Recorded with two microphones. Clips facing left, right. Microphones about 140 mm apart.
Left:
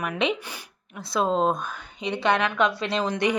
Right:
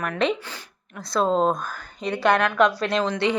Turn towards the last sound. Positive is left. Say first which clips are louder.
# right 1 dB
turn(degrees=15)  # may be behind; listen again after turning